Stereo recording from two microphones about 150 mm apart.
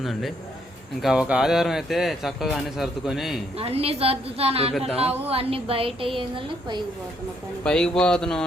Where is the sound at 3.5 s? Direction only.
40° right (ahead or behind).